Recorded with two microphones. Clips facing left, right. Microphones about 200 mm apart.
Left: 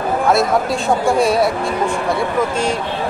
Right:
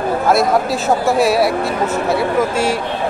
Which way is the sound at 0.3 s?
Centre (ahead or behind).